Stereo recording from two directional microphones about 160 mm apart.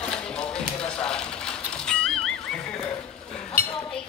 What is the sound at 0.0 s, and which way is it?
Tap, 5° left (ahead or behind).